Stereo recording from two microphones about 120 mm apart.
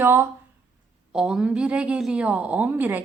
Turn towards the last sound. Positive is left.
turn(degrees=-15)  # may be behind; listen again after turning